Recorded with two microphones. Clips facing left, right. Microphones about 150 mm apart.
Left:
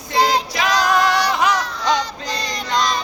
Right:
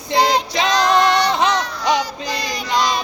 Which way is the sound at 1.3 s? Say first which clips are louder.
Right 1 dB; 20° right (ahead or behind).